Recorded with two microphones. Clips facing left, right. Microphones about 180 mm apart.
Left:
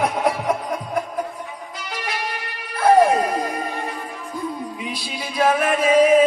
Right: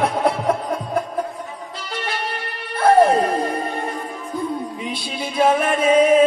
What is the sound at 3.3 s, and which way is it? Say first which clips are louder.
Music: right 3 dB; 30° right (ahead or behind).